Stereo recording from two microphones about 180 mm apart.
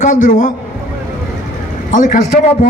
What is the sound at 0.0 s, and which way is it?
Speech, 45° left (ahead or behind).